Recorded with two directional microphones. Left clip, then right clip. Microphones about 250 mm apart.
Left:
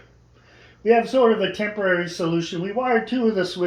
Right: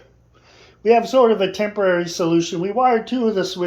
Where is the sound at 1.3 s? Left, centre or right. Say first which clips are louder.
Right 4 dB; centre.